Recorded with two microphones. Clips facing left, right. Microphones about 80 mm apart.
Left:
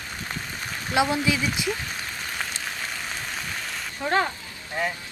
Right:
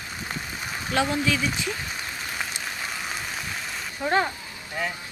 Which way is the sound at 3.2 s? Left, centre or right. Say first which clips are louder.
Even; centre.